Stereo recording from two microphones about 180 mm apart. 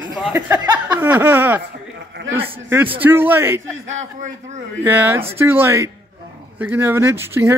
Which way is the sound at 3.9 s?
40° right (ahead or behind).